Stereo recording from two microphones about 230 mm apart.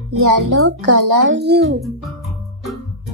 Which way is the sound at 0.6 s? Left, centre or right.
Right.